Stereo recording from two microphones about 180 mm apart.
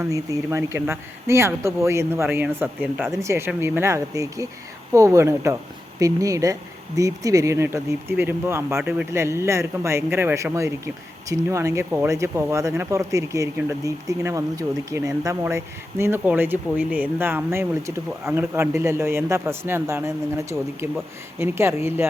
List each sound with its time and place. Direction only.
0.0 s speech: 15° right (ahead or behind)